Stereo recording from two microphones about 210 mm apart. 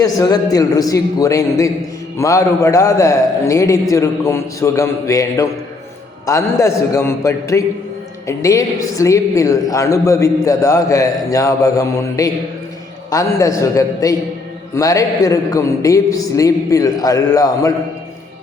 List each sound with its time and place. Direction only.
0.0 s a woman's voice: 15° left (ahead or behind)